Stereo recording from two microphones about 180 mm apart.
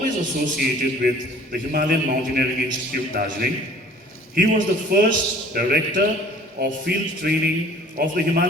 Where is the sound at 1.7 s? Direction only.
55° right (ahead or behind).